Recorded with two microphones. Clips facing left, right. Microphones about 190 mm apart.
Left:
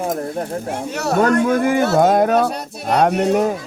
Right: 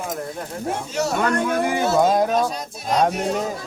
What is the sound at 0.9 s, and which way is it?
Speech, 60° left (ahead or behind).